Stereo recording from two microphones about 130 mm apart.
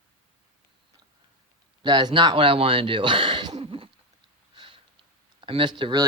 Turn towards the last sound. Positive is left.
turn(degrees=-35)  # may be behind; listen again after turning